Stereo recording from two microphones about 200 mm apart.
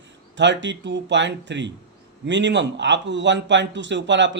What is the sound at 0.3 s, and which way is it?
A man's voice, 65° right (ahead or behind).